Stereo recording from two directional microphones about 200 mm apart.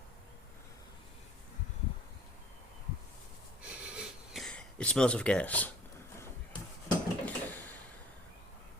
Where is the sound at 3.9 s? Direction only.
Centre (ahead or behind).